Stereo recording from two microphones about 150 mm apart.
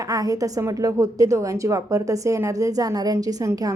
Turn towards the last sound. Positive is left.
turn(degrees=-20)  # may be behind; listen again after turning